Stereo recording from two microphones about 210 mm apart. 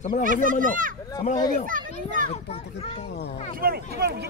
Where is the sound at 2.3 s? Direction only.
30° left (ahead or behind).